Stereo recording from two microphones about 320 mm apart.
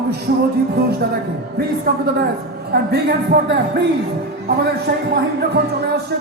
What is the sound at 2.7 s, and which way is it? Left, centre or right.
Speech, right.